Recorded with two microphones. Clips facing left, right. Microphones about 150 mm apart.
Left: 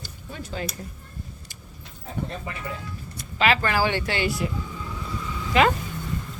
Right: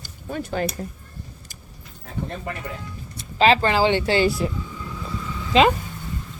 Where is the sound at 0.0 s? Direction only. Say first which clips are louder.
Right 7 dB; 55° right (ahead or behind).